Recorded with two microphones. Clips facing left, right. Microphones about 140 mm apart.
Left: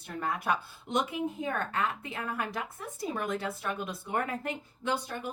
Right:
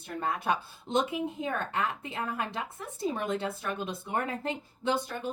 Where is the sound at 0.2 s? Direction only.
25° right (ahead or behind).